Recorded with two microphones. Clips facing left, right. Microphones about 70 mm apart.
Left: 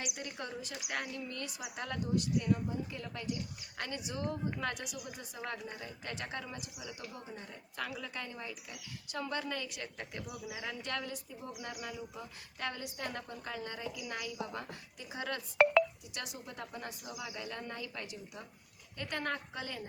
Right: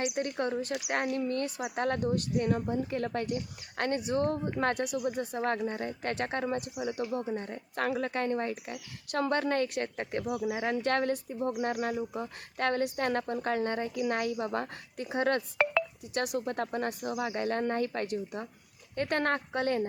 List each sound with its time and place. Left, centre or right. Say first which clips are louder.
0.2 s speech: right 11 dB; right